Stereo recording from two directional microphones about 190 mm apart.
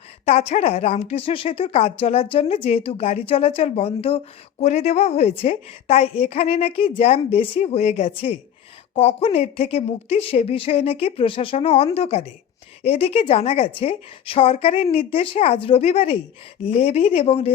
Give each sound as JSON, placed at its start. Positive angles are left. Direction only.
{"t": 0.3, "sound": "speech", "side_deg": 35}